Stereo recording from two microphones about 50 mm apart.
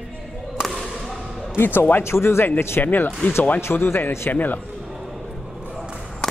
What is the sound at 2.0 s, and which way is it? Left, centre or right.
Speech, left.